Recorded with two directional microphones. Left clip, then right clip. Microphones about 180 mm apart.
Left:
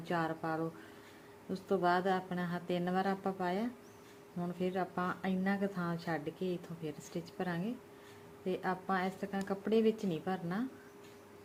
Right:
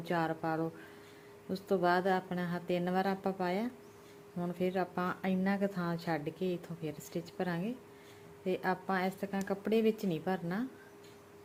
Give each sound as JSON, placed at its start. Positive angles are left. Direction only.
{"t": 0.0, "sound": "a woman's voice", "side_deg": -15}